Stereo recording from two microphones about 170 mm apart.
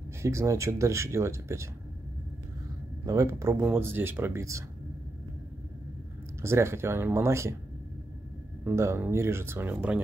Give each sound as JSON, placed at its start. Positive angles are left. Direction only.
{"t": 0.2, "sound": "speech", "side_deg": -15}
{"t": 3.1, "sound": "speech", "side_deg": -20}
{"t": 6.4, "sound": "speech", "side_deg": -15}
{"t": 8.6, "sound": "speech", "side_deg": -15}